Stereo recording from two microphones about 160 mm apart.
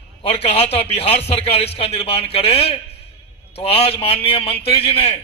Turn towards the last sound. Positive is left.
turn(degrees=35)  # may be behind; listen again after turning